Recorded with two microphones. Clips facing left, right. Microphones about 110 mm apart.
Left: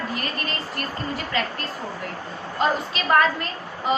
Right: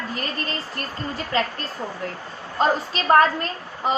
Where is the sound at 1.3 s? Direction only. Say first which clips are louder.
Right 3 dB; 35° right (ahead or behind).